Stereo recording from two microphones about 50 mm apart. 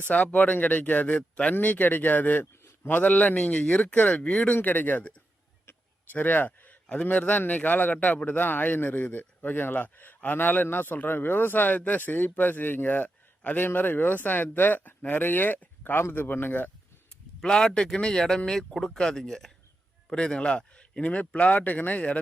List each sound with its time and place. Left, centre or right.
0.0 s speech: left
4.5 s speech: left
17.4 s speech: centre; by 22.2 s left